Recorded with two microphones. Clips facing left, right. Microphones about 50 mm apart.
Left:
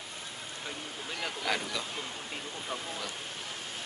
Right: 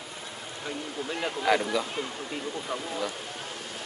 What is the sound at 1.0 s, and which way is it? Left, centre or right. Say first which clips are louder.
Speech: right 8 dB; right.